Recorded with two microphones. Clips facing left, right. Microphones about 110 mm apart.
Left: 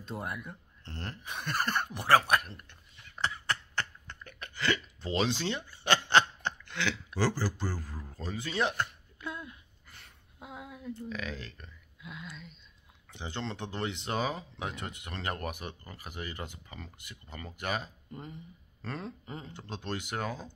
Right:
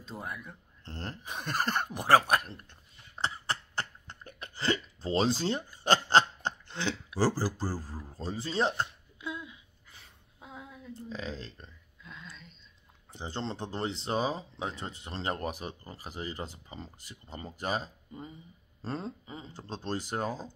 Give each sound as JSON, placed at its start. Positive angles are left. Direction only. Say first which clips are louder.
{"t": 0.0, "sound": "speech", "louder": "left 2 dB", "side_deg": 0}
{"t": 0.8, "sound": "speech", "louder": "right 1 dB", "side_deg": -35}
{"t": 3.2, "sound": "a sound", "louder": "even", "side_deg": -30}
{"t": 7.2, "sound": "speech", "louder": "right 3 dB", "side_deg": -35}
{"t": 7.9, "sound": "a man's voice", "louder": "right 2 dB", "side_deg": -10}
{"t": 8.2, "sound": "speech", "louder": "right 2 dB", "side_deg": -30}
{"t": 9.5, "sound": "a sound", "louder": "left 2 dB", "side_deg": 0}
{"t": 11.0, "sound": "speech", "louder": "right 3 dB", "side_deg": -30}
{"t": 12.0, "sound": "speech", "louder": "left 4 dB", "side_deg": 5}
{"t": 13.1, "sound": "speech", "louder": "right 1 dB", "side_deg": -35}
{"t": 18.1, "sound": "speech", "louder": "left 1 dB", "side_deg": -5}
{"t": 18.8, "sound": "speech", "louder": "right 3 dB", "side_deg": -30}